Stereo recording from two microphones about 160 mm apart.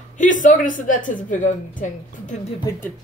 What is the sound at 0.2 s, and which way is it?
A woman's voice, 55° left (ahead or behind).